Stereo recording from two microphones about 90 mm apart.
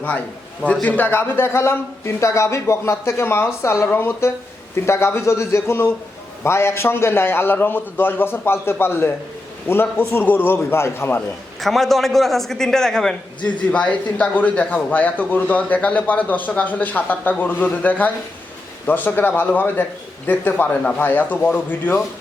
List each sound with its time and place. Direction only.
0.7 s a man's voice: 15° left (ahead or behind)
11.6 s a man's voice: centre (ahead or behind); by 22.0 s 20° left (ahead or behind)